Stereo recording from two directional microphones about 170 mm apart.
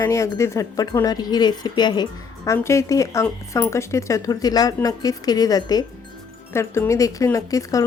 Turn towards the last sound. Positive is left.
turn(degrees=20)  # may be behind; listen again after turning